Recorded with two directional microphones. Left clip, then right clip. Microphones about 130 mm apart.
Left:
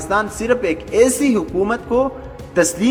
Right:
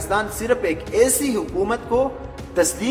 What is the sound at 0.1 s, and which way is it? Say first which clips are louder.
A woman's voice: left 3 dB; 25° left (ahead or behind).